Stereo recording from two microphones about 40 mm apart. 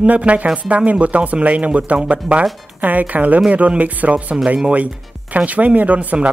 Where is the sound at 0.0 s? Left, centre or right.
Right.